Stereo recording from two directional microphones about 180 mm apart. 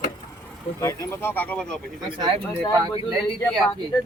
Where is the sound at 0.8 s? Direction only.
15° left (ahead or behind).